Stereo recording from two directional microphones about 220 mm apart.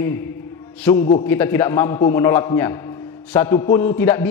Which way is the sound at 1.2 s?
10° left (ahead or behind).